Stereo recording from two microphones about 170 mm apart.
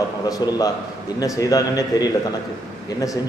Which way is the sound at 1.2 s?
20° left (ahead or behind).